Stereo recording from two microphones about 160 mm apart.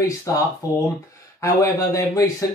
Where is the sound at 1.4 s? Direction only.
20° left (ahead or behind).